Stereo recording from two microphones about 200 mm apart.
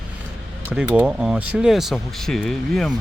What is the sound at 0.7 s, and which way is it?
Speech, 10° right (ahead or behind).